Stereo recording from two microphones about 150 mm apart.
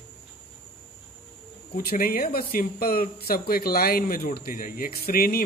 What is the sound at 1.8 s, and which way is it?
Speech, 85° left.